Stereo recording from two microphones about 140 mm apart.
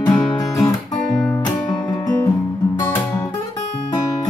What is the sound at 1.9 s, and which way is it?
Music, 25° left (ahead or behind).